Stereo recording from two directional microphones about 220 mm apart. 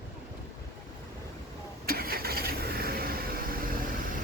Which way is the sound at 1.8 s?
45° right (ahead or behind).